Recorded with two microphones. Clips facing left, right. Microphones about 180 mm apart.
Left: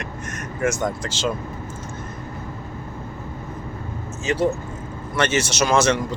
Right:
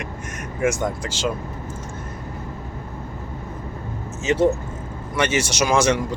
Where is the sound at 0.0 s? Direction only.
10° right (ahead or behind).